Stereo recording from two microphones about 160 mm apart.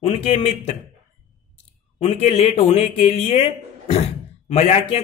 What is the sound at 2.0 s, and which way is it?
Speech, 40° left (ahead or behind).